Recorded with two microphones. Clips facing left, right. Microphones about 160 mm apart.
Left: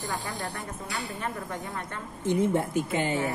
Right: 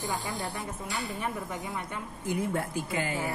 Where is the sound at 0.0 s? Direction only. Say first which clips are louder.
Even; 20° right (ahead or behind).